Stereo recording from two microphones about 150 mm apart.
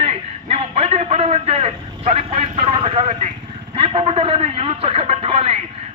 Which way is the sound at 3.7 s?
35° right (ahead or behind).